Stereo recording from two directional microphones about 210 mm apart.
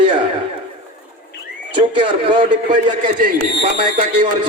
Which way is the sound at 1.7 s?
25° right (ahead or behind).